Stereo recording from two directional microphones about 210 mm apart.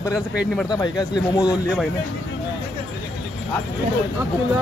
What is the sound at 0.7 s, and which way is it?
Speech, 20° left (ahead or behind).